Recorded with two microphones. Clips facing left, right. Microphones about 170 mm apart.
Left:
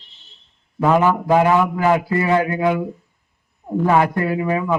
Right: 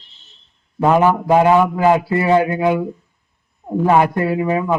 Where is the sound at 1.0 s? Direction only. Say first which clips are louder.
Right 2 dB; 25° right (ahead or behind).